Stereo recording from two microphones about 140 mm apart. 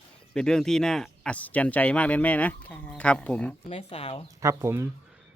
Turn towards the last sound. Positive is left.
turn(degrees=-20)  # may be behind; listen again after turning